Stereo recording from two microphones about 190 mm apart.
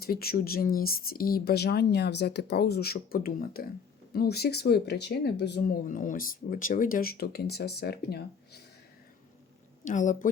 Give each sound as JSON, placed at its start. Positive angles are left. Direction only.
{"t": 0.0, "sound": "speech", "side_deg": 55}
{"t": 9.8, "sound": "speech", "side_deg": 40}